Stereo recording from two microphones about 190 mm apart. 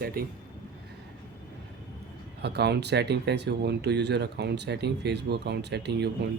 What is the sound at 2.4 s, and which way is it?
Speech, 60° right (ahead or behind).